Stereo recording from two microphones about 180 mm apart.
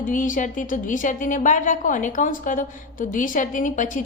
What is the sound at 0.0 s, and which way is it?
A woman's voice, 45° left (ahead or behind).